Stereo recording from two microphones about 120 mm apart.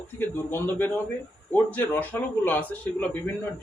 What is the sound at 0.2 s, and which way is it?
A man's voice, 15° left (ahead or behind).